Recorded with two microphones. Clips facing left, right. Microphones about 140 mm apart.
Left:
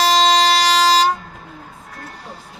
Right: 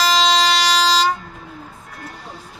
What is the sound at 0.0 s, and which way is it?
Air horn, 50° left (ahead or behind).